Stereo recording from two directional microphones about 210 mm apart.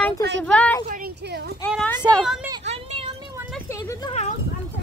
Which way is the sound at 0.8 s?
40° right (ahead or behind).